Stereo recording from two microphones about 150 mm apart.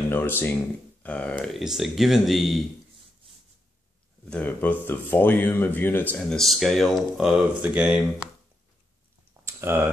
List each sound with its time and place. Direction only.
0.1 s speech: 15° left (ahead or behind)
4.3 s speech: 10° left (ahead or behind); by 8.3 s 10° right (ahead or behind)
9.4 s a sound: 15° right (ahead or behind)